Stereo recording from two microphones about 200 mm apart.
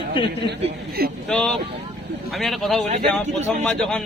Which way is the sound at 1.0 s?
50° right (ahead or behind).